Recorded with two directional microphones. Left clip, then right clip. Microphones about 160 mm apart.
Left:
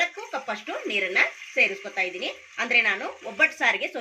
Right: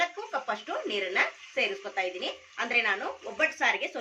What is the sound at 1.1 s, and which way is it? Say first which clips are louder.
A woman's voice: left 6 dB; 20° left (ahead or behind).